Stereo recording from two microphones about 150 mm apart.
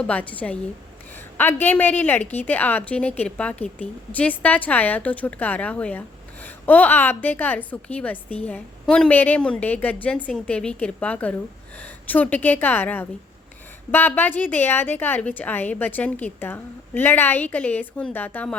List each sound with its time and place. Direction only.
0.1 s a woman's voice: 10° left (ahead or behind)